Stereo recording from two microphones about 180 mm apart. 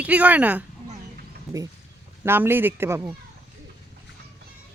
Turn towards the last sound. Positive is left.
turn(degrees=-10)  # may be behind; listen again after turning